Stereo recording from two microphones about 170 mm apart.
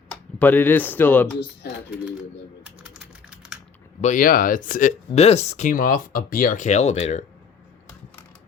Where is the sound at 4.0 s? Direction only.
50° left (ahead or behind).